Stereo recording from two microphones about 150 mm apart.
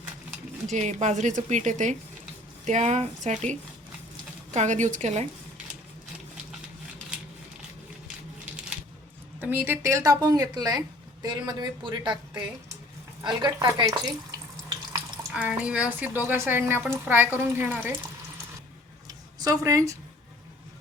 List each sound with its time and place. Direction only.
0.7 s a woman's voice: 50° right (ahead or behind)
9.4 s speech: 15° right (ahead or behind)
15.3 s speech: 10° right (ahead or behind)
19.0 s a sound: 25° right (ahead or behind)